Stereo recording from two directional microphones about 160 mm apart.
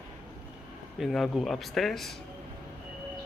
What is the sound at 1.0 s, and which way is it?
Speech, centre (ahead or behind).